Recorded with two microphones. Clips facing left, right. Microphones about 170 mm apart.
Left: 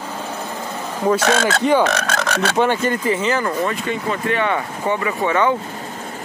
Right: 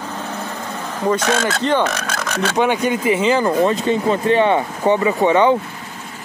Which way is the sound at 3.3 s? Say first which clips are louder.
Right 5 dB; 25° right (ahead or behind).